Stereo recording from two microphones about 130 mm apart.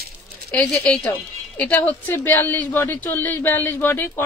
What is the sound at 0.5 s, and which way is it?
A woman's voice, 10° left (ahead or behind).